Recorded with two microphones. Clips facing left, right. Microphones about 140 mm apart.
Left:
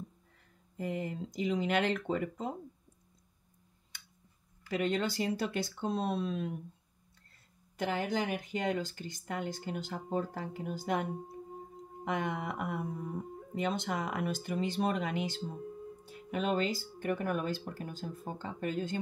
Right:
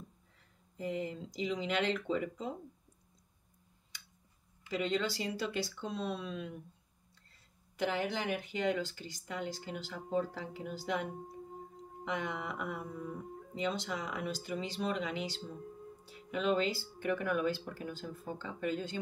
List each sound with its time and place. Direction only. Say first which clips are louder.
0.7 s speech: left 1 dB; 50° left (ahead or behind)
4.6 s speech: left 2 dB; 50° left (ahead or behind)
7.7 s speech: left 1 dB; 45° left (ahead or behind)